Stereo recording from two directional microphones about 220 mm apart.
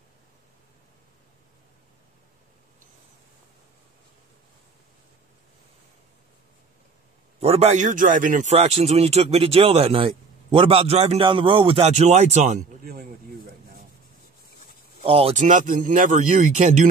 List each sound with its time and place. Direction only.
7.3 s a man's voice: 25° right (ahead or behind); by 13.8 s 40° right (ahead or behind)
15.0 s speech: 25° right (ahead or behind)